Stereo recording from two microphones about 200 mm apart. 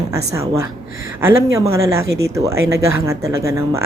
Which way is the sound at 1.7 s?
15° right (ahead or behind).